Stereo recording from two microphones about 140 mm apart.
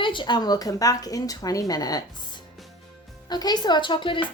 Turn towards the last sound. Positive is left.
turn(degrees=35)  # may be behind; listen again after turning